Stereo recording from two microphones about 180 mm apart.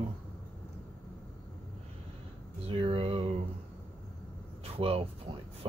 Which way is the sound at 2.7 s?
30° right (ahead or behind).